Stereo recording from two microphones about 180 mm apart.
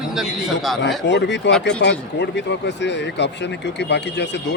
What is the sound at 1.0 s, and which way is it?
Speech, 75° left (ahead or behind).